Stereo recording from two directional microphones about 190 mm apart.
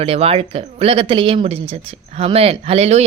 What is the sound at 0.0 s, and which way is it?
A woman's voice, 30° right (ahead or behind).